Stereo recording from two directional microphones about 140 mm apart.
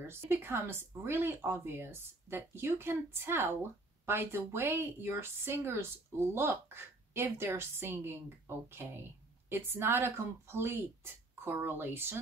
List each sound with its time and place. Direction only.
0.0 s a woman's voice: 15° right (ahead or behind)